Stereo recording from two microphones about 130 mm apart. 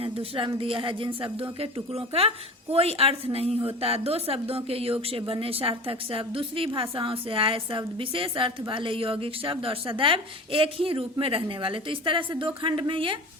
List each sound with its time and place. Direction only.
0.0 s speech: 45° right (ahead or behind)